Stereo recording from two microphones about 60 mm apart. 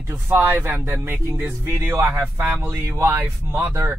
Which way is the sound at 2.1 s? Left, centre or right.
Right.